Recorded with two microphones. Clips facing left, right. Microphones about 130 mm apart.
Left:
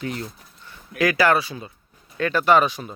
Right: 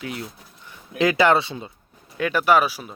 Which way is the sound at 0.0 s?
5° right (ahead or behind).